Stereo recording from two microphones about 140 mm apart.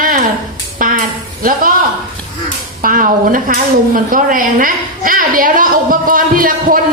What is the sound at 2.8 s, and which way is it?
Speech, 80° right.